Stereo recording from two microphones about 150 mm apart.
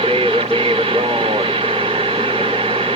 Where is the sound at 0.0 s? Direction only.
40° right (ahead or behind).